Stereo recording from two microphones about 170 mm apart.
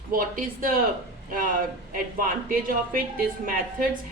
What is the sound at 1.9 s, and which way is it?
Speech, 55° right (ahead or behind).